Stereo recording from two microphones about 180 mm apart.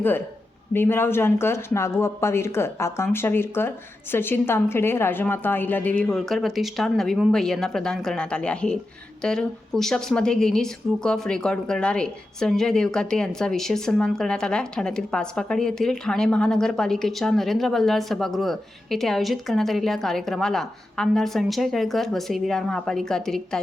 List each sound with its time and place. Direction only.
0.7 s a woman's voice: 10° left (ahead or behind)